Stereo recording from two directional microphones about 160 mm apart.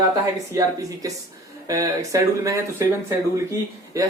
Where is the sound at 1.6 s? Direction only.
20° right (ahead or behind).